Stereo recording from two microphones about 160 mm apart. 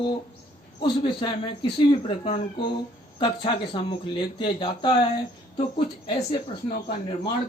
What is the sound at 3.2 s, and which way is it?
Speech, 30° left (ahead or behind).